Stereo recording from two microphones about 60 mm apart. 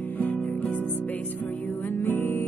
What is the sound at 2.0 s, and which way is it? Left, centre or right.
Music, left.